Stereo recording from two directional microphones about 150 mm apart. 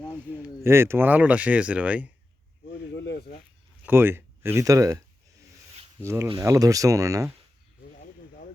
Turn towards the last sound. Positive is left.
turn(degrees=-20)  # may be behind; listen again after turning